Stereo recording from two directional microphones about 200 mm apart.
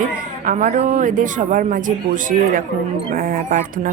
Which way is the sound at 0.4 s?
40° right (ahead or behind).